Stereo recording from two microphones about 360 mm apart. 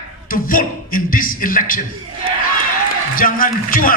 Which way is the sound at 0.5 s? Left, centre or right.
Left.